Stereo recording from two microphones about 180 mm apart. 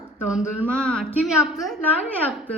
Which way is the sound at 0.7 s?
5° left (ahead or behind).